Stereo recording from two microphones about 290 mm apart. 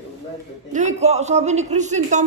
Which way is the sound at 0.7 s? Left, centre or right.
Right.